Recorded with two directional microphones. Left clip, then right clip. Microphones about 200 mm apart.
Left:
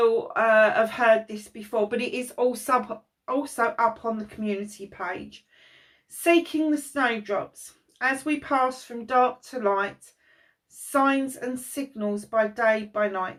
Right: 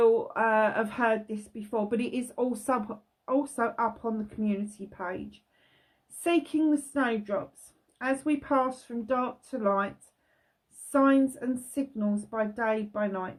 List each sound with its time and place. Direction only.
0.0 s speech: 45° right (ahead or behind)
6.2 s speech: 50° right (ahead or behind)
10.9 s speech: 45° right (ahead or behind)